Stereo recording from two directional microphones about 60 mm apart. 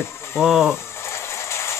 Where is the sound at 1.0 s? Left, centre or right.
Left.